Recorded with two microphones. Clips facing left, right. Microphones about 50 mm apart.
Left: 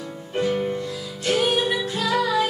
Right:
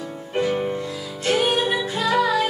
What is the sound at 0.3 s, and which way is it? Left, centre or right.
Music, centre.